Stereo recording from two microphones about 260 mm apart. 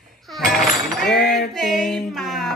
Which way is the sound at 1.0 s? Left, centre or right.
Centre.